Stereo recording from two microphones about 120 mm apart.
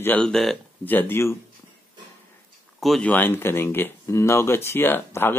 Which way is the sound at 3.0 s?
15° left (ahead or behind).